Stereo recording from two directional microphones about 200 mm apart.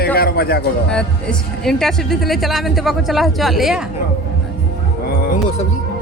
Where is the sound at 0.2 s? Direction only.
50° left (ahead or behind).